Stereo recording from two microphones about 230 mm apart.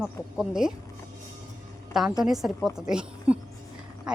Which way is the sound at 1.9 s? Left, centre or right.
Centre.